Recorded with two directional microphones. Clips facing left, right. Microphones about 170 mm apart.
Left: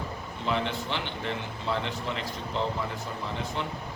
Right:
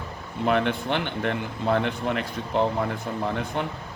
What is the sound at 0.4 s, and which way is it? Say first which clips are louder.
A man's voice: right 7 dB; 55° right (ahead or behind).